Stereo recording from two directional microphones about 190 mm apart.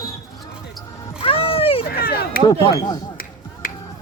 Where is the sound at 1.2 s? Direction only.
30° left (ahead or behind).